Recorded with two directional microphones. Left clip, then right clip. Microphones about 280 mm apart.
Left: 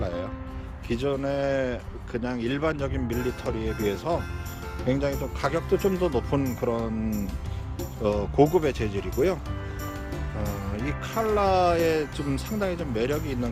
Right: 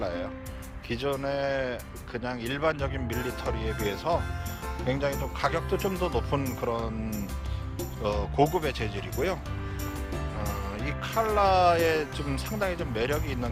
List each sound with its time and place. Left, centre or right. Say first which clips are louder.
0.9 s speech: left 2 dB; centre
10.4 s speech: left 3 dB; centre